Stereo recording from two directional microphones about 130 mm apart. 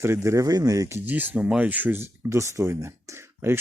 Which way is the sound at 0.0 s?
20° right (ahead or behind).